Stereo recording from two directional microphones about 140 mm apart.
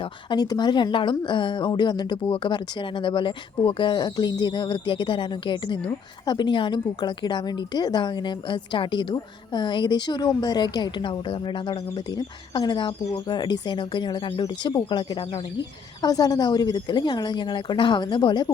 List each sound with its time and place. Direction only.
0.0 s a woman's voice: 30° left (ahead or behind)